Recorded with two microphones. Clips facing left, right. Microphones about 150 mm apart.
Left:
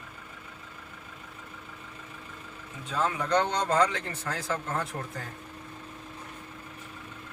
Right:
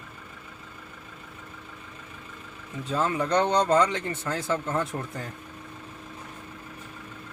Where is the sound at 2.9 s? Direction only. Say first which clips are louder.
Right 2 dB; 20° right (ahead or behind).